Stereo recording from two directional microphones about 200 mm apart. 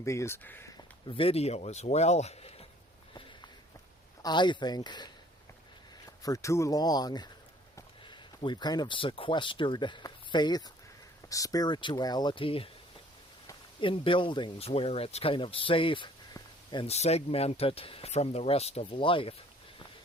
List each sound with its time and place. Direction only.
0.0 s speech: 15° left (ahead or behind)
1.0 s speech: 25° left (ahead or behind)
4.2 s speech: 20° left (ahead or behind)
6.2 s speech: 15° left (ahead or behind)